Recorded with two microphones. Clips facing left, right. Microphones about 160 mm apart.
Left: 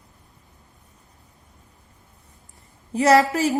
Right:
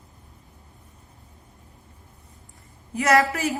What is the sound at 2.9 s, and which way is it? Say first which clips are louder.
Speech: left 4 dB; 30° left (ahead or behind).